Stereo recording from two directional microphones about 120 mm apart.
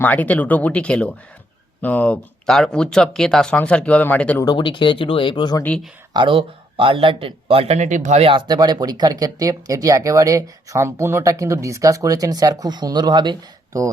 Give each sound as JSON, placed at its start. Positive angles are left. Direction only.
{"t": 0.0, "sound": "speech", "side_deg": 15}
{"t": 4.5, "sound": "speech", "side_deg": 40}
{"t": 6.1, "sound": "speech", "side_deg": -45}
{"t": 8.3, "sound": "speech", "side_deg": -40}